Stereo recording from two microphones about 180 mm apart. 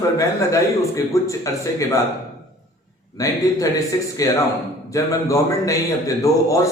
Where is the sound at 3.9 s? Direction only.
20° left (ahead or behind).